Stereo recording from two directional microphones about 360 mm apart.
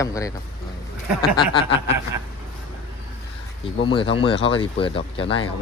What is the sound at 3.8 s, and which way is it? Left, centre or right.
Speech, centre.